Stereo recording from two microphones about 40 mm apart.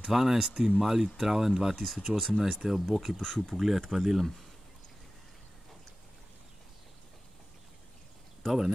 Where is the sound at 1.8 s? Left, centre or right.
Centre.